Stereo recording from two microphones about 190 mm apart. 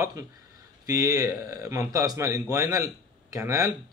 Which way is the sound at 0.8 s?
15° right (ahead or behind).